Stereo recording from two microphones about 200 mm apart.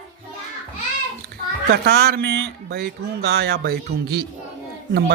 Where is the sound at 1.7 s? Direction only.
55° right (ahead or behind).